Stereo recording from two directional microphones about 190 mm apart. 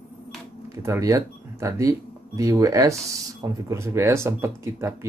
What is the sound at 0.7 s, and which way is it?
Speech, 15° right (ahead or behind).